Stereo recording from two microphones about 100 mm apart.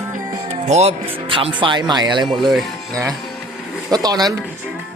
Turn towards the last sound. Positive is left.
turn(degrees=-40)  # may be behind; listen again after turning